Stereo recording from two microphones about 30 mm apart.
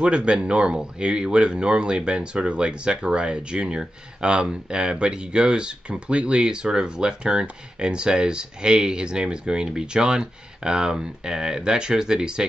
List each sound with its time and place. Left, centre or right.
0.0 s speech: right